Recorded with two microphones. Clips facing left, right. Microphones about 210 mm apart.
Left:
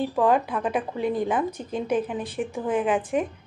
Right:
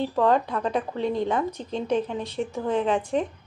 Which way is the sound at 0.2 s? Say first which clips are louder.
Even; 15° left (ahead or behind).